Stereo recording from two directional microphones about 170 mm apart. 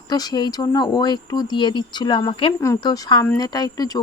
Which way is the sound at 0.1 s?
25° left (ahead or behind).